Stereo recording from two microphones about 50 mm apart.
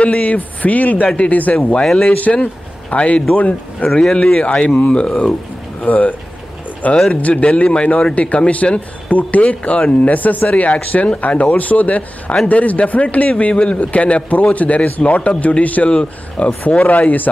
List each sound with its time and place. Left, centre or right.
0.0 s a man's voice: left
4.0 s a man's voice: centre
5.8 s a man's voice: left